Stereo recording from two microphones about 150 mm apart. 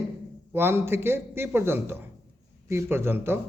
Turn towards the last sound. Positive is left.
turn(degrees=-15)  # may be behind; listen again after turning